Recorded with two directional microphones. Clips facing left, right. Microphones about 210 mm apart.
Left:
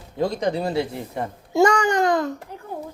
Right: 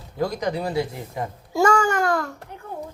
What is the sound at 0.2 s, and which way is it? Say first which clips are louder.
A child's voice: left 2 dB; 30° left (ahead or behind).